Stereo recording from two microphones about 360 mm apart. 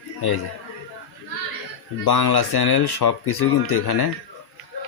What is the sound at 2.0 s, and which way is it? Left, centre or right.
Speech, left.